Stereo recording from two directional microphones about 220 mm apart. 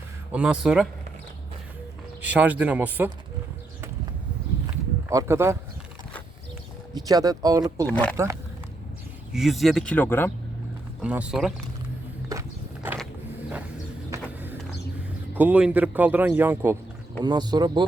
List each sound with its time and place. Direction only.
0.3 s speech: 5° right (ahead or behind)
2.2 s a man's voice: 5° right (ahead or behind)
4.6 s a sound: 15° right (ahead or behind)
6.9 s a man's voice: 15° right (ahead or behind)
7.9 s speech: 5° left (ahead or behind)
8.1 s a man's voice: 15° right (ahead or behind)
9.3 s speech: centre (ahead or behind)
11.0 s speech: 5° right (ahead or behind)
12.3 s walk: 10° right (ahead or behind)
14.1 s a sound: 10° right (ahead or behind)
15.4 s a man's voice: 5° right (ahead or behind)